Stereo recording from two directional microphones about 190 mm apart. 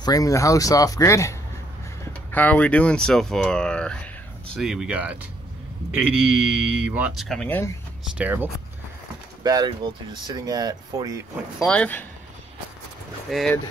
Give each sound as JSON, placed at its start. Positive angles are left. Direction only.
{"t": 0.0, "sound": "speech", "side_deg": 20}
{"t": 2.3, "sound": "speech", "side_deg": 10}
{"t": 8.2, "sound": "speech", "side_deg": -10}
{"t": 9.4, "sound": "speech", "side_deg": -20}
{"t": 11.6, "sound": "speech", "side_deg": 5}
{"t": 13.3, "sound": "speech", "side_deg": 0}